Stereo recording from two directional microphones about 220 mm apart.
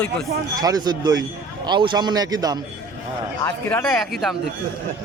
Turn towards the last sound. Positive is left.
turn(degrees=0)  # may be behind; listen again after turning